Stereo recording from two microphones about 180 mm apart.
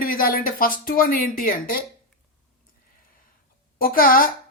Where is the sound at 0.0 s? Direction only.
50° left (ahead or behind).